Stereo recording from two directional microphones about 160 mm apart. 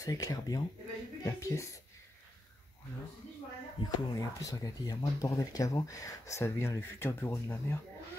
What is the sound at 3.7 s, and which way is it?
Speech, 25° left (ahead or behind).